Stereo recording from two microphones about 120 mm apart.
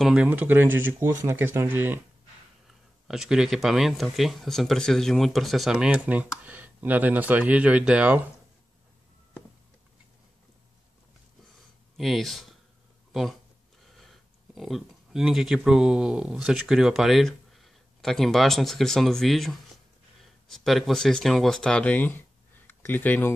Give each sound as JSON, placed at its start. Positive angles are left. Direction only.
{"t": 0.0, "sound": "speech", "side_deg": -5}
{"t": 3.1, "sound": "speech", "side_deg": -5}
{"t": 12.0, "sound": "speech", "side_deg": 0}